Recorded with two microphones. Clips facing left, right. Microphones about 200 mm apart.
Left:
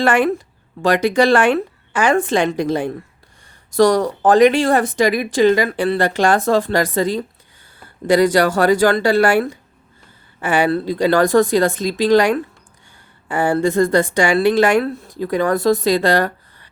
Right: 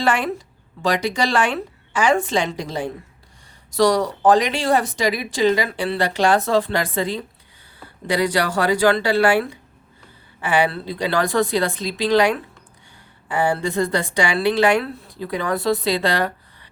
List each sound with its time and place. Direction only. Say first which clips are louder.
0.0 s a woman's voice: left 5 dB; 55° left (ahead or behind)